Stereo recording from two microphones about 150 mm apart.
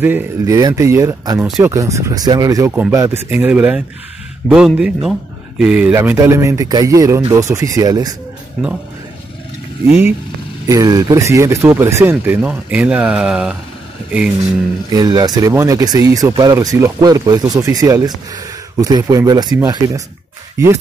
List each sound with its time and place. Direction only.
0.0 s speech: 15° right (ahead or behind)
10.7 s speech: 25° right (ahead or behind); by 13.6 s 5° right (ahead or behind)
14.9 s speech: 25° right (ahead or behind)